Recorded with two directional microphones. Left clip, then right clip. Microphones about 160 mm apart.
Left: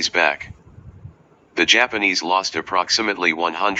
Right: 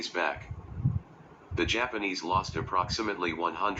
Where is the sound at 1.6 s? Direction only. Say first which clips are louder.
Left 13 dB; 45° left (ahead or behind).